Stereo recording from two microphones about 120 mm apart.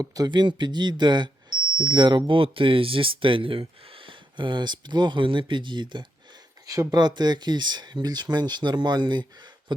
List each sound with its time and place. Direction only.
0.0 s speech: 30° right (ahead or behind)